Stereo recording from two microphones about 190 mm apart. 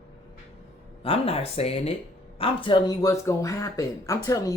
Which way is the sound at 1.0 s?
30° left (ahead or behind).